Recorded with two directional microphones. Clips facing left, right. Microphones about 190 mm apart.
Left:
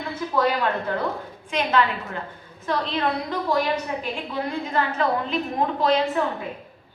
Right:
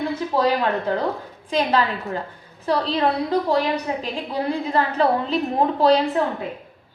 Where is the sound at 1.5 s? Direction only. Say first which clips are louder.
Right 2 dB; 35° right (ahead or behind).